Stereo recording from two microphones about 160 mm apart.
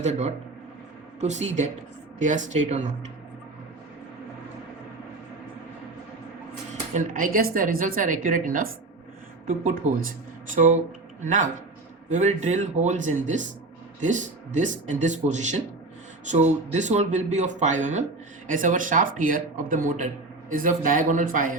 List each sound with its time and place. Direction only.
0.0 s speech: 45° right (ahead or behind)
6.9 s a woman's voice: 55° right (ahead or behind)